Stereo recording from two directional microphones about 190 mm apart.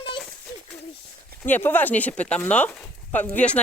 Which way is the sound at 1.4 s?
10° left (ahead or behind).